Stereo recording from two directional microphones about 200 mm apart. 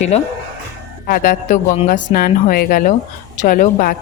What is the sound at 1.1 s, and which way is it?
A woman's voice, 45° left (ahead or behind).